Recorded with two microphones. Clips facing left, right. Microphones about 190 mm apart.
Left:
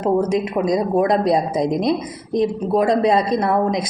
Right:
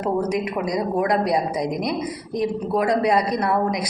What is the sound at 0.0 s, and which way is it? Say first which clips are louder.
Speech: left 4 dB; 25° left (ahead or behind).